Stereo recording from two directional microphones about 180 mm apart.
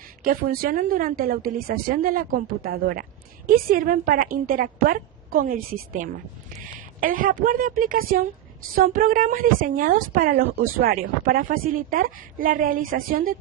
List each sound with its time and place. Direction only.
0.3 s a woman's voice: 55° right (ahead or behind)